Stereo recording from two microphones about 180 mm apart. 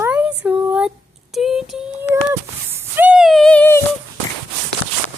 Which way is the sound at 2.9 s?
5° right (ahead or behind).